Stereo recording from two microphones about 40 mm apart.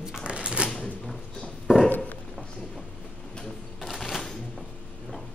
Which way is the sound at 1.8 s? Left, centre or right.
Left.